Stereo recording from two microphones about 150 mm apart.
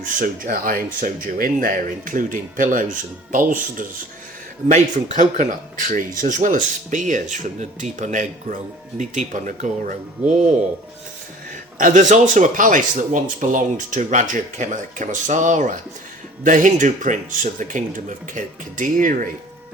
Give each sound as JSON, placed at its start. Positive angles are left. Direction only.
{"t": 0.0, "sound": "speech", "side_deg": -65}
{"t": 5.1, "sound": "speech", "side_deg": -60}
{"t": 11.8, "sound": "speech", "side_deg": -55}